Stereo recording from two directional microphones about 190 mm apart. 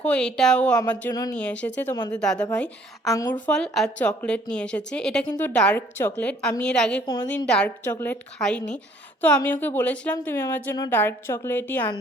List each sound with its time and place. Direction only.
0.0 s a woman's voice: 5° left (ahead or behind)
2.6 s a woman's voice: 15° left (ahead or behind)
3.4 s a woman's voice: 5° left (ahead or behind)